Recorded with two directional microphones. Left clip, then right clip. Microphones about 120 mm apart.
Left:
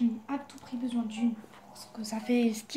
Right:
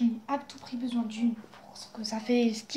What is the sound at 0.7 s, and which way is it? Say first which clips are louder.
Speech: right 1 dB; 10° right (ahead or behind).